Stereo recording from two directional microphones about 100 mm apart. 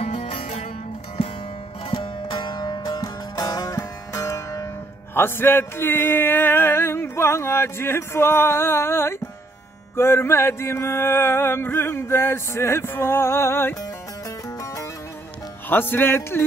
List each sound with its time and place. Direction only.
0.0 s music: 90° left
1.9 s music: 50° left (ahead or behind); by 13.7 s 25° left (ahead or behind)
15.7 s music: 20° left (ahead or behind)